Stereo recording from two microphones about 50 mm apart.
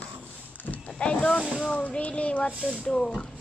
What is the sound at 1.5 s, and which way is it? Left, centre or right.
Speech, left.